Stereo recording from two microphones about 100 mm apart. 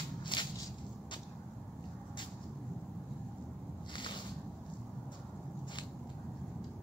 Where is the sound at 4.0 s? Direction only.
50° left (ahead or behind).